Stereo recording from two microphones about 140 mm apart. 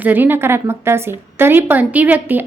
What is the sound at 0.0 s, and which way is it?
A woman's voice, 15° right (ahead or behind).